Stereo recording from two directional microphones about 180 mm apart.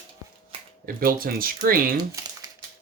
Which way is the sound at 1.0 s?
55° right (ahead or behind).